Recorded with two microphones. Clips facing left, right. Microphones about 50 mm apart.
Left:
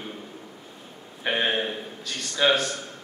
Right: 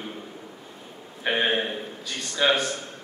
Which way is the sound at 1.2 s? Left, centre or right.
Centre.